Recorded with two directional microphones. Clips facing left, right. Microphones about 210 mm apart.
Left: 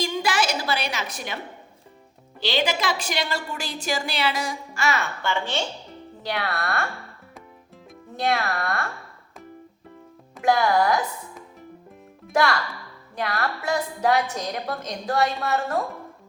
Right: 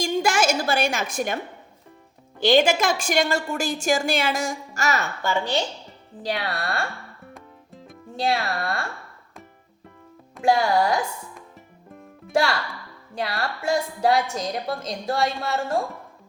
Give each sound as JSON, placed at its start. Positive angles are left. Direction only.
{"t": 0.0, "sound": "a sound", "side_deg": -45}
{"t": 2.4, "sound": "a woman's voice", "side_deg": -50}
{"t": 8.2, "sound": "speech", "side_deg": -30}
{"t": 10.4, "sound": "speech", "side_deg": -30}
{"t": 12.3, "sound": "speech", "side_deg": -30}
{"t": 15.0, "sound": "speech", "side_deg": -25}